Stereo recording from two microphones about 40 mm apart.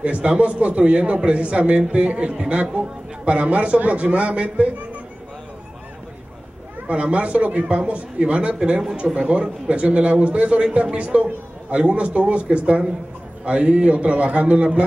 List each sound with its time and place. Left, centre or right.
0.0 s a man's voice: right
6.9 s a man's voice: right
7.6 s a man's voice: right